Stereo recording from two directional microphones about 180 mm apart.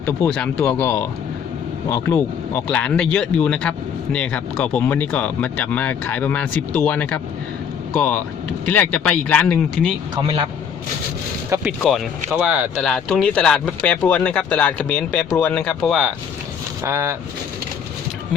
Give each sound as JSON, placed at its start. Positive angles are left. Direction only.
{"t": 0.0, "sound": "a man's voice", "side_deg": 10}
{"t": 11.8, "sound": "speech", "side_deg": 0}
{"t": 12.9, "sound": "a man's voice", "side_deg": 0}
{"t": 16.8, "sound": "speech", "side_deg": -15}